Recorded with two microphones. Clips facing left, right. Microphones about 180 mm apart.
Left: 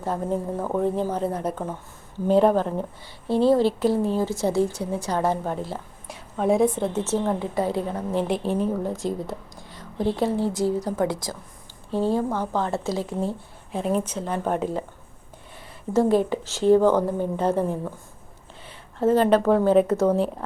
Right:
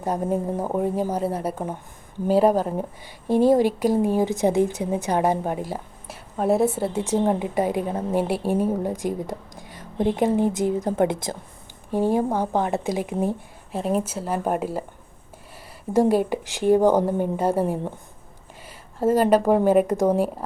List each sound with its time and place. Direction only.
0.0 s a woman's voice: 15° right (ahead or behind)
13.7 s a woman's voice: 5° right (ahead or behind)
15.9 s a woman's voice: 10° right (ahead or behind)
18.9 s a woman's voice: 10° right (ahead or behind)